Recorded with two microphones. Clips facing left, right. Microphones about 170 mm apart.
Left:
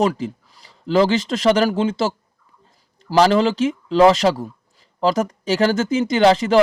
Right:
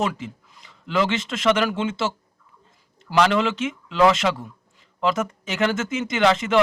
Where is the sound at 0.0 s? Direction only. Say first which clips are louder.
Left 6 dB; 35° left (ahead or behind).